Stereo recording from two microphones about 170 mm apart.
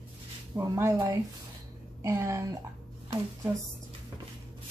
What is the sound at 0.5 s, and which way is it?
A woman's voice, 15° right (ahead or behind).